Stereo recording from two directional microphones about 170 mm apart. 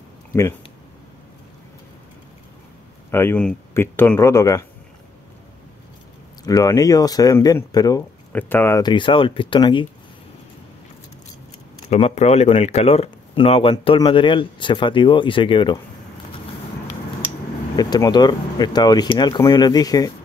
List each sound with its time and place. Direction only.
0.3 s speech: 15° left (ahead or behind)
3.1 s speech: 15° left (ahead or behind)
6.4 s speech: 20° left (ahead or behind)
8.3 s speech: 10° left (ahead or behind)
8.8 s speech: 30° left (ahead or behind)
11.9 s speech: 40° left (ahead or behind)
17.7 s speech: 20° left (ahead or behind)